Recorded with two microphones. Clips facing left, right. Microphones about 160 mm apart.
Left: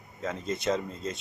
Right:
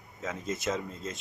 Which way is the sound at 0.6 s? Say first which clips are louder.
Left 5 dB; 5° right (ahead or behind).